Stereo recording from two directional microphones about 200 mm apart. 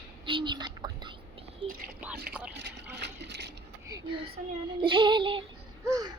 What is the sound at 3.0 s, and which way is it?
Water, 60° right (ahead or behind).